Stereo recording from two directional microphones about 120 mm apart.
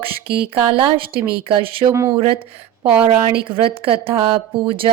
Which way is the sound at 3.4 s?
45° right (ahead or behind).